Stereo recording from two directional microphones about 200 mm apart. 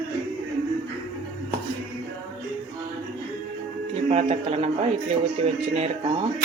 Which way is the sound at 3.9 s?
35° right (ahead or behind).